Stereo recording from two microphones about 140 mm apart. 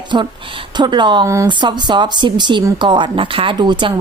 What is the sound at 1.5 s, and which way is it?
Speech, 35° right (ahead or behind).